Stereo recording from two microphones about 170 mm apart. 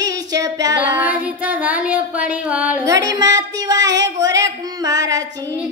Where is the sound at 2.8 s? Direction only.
20° right (ahead or behind).